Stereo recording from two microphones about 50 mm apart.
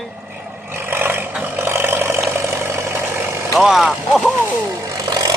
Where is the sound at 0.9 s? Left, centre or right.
Right.